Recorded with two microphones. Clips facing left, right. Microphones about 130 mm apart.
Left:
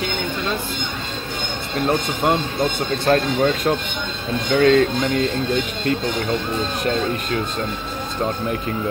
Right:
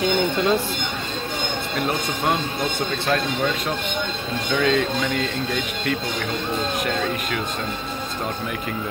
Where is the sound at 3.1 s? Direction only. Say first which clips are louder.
Left 6 dB; 40° left (ahead or behind).